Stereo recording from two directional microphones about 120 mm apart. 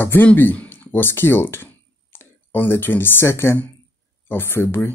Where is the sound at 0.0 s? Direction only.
15° left (ahead or behind).